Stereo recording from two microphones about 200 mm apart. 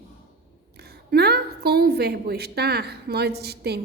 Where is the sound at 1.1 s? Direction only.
55° right (ahead or behind).